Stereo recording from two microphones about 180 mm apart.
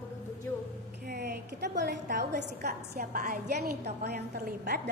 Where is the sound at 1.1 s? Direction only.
70° right (ahead or behind).